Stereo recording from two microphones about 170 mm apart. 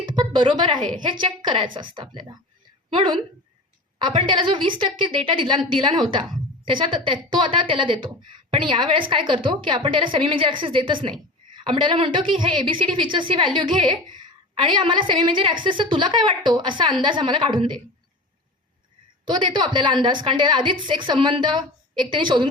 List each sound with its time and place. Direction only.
0.0 s a sound: 30° right (ahead or behind)
1.2 s a woman's voice: 30° right (ahead or behind)
19.2 s a woman's voice: 25° right (ahead or behind)